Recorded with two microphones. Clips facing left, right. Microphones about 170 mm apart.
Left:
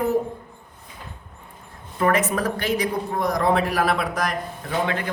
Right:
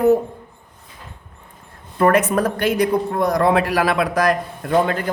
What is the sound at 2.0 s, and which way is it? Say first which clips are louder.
Speech: right 5 dB; 55° right (ahead or behind).